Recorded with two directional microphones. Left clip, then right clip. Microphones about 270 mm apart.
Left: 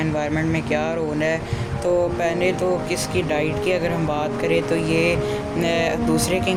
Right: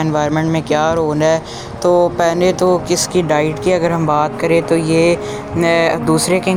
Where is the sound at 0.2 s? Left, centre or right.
Centre.